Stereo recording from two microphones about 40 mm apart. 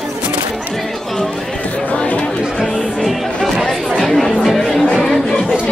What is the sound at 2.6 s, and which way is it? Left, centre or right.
Music, centre.